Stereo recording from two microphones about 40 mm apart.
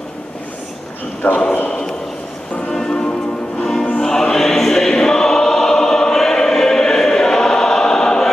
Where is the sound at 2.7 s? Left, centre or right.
Centre.